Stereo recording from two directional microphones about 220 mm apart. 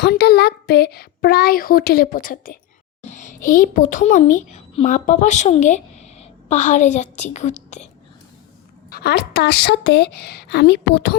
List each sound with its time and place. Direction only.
0.0 s speech: 45° left (ahead or behind)
3.1 s a sound: 35° left (ahead or behind)
3.4 s a woman's voice: 40° left (ahead or behind)
8.9 s speech: 45° left (ahead or behind)